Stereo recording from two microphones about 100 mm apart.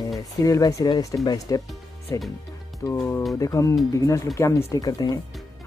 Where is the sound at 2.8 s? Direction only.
25° left (ahead or behind).